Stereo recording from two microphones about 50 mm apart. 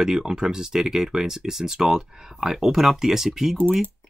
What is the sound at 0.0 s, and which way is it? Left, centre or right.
Speech, centre.